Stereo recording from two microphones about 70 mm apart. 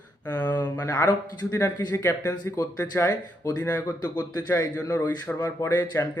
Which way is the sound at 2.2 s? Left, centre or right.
Left.